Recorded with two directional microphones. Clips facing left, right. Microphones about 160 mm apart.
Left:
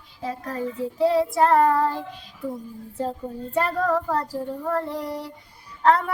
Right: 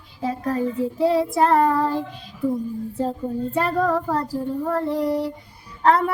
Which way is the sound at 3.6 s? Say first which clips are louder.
Right 3 dB; 10° right (ahead or behind).